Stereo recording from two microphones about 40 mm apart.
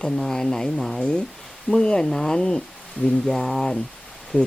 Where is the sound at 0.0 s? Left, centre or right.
Centre.